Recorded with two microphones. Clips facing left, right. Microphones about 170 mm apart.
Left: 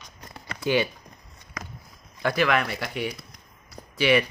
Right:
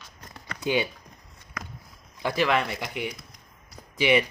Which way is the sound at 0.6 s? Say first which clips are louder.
Left 2 dB; 15° right (ahead or behind).